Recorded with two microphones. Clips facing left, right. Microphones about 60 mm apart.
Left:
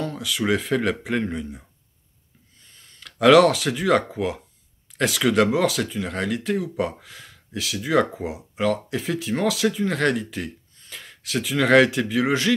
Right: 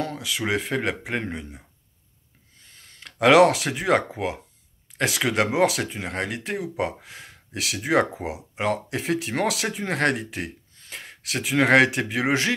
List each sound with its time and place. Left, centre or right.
0.1 s a sound: right
0.6 s speech: centre
3.2 s speech: centre